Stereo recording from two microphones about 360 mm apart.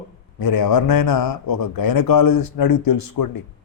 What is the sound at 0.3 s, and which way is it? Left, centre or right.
A man's voice, left.